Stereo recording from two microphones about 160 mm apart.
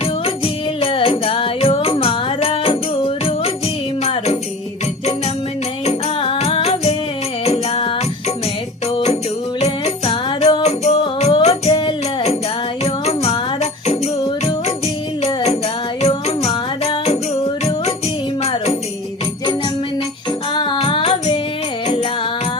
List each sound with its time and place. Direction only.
0.0 s music: 35° left (ahead or behind)
5.8 s music: 40° left (ahead or behind)
10.2 s music: 30° left (ahead or behind)
10.6 s music: 40° left (ahead or behind)
16.0 s music: 40° left (ahead or behind)
20.5 s music: 30° left (ahead or behind)